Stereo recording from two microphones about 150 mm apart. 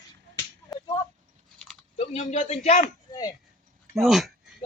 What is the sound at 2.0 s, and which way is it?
Speech, 45° left (ahead or behind).